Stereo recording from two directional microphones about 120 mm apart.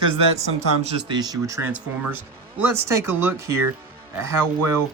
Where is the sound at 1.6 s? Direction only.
15° right (ahead or behind).